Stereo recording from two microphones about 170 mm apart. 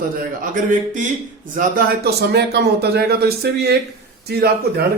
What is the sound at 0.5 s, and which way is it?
A man's voice, 50° right (ahead or behind).